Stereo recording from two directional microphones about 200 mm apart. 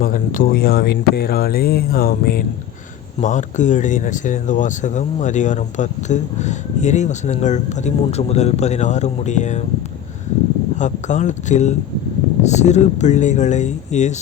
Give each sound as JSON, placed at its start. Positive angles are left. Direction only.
{"t": 0.0, "sound": "speech", "side_deg": 45}
{"t": 10.8, "sound": "speech", "side_deg": 35}